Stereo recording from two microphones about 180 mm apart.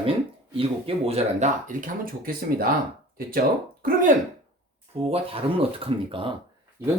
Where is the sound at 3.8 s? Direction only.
50° right (ahead or behind).